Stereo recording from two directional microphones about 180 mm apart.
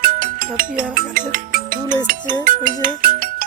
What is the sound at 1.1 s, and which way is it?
Speech, 50° right (ahead or behind).